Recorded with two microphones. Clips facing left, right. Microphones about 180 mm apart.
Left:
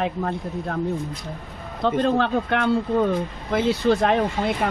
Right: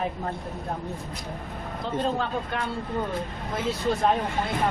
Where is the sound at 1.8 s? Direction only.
80° left.